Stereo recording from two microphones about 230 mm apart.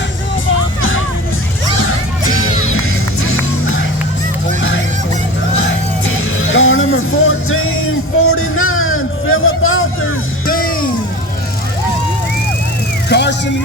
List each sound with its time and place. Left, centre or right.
0.8 s music: left
5.5 s music: left
10.4 s music: left
13.1 s music: left